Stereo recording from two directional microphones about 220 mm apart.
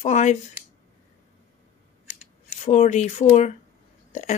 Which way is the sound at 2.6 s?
30° left (ahead or behind).